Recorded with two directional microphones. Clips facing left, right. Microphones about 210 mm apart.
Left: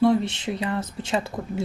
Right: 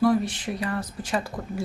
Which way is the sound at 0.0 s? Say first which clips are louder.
Left 2 dB; 25° left (ahead or behind).